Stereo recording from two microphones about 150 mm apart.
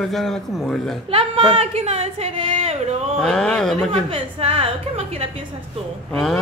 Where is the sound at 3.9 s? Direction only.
40° right (ahead or behind).